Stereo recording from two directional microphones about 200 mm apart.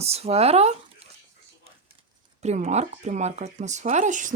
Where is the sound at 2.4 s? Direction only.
35° right (ahead or behind).